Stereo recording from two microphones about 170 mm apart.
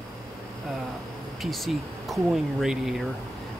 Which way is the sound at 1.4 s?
Centre (ahead or behind).